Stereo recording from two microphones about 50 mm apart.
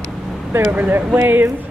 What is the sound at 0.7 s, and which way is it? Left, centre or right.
Speech, right.